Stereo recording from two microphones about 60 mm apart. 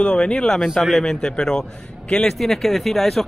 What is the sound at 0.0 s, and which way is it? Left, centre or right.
Speech, centre.